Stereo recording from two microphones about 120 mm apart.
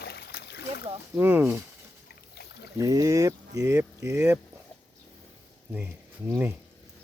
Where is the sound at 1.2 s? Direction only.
15° right (ahead or behind).